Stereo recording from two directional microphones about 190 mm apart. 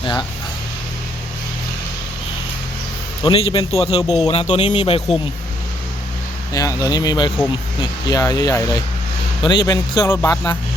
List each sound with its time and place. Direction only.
0.0 s speech: 20° left (ahead or behind)
3.2 s a man's voice: 30° left (ahead or behind)
6.5 s speech: 20° left (ahead or behind)